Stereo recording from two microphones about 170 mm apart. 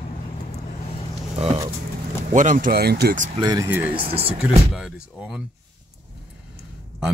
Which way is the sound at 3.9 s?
30° right (ahead or behind).